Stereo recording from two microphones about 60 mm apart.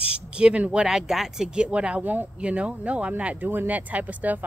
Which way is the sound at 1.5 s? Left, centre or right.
Centre.